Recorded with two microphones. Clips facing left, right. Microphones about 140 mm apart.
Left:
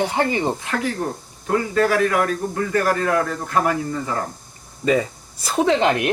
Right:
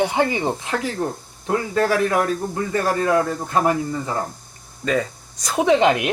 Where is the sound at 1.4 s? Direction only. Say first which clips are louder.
Left 1 dB; 30° right (ahead or behind).